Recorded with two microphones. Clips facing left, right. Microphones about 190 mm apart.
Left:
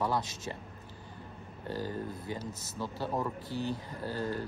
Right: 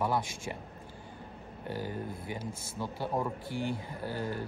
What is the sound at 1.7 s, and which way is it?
A man's voice, 15° right (ahead or behind).